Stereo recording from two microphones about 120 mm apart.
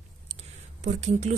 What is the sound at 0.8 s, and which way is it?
Speech, 75° right (ahead or behind).